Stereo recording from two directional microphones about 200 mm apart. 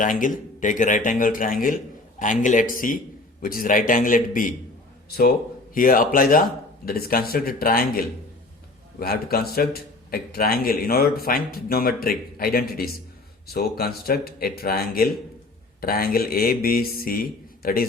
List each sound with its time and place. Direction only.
0.0 s a man's voice: 40° left (ahead or behind)
5.7 s a man's voice: 45° left (ahead or behind)